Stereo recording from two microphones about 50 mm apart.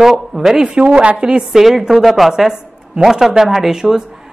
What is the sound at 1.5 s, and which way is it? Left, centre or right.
A woman's voice, centre.